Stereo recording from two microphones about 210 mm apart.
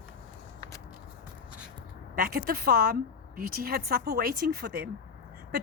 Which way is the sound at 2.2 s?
45° right (ahead or behind).